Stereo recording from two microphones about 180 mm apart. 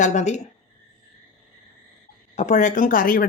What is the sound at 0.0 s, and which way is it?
Speech, 40° left (ahead or behind).